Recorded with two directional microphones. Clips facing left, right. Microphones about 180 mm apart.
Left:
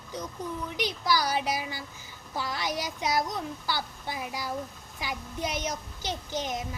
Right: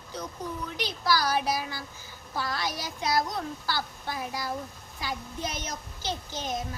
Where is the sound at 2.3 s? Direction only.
15° left (ahead or behind).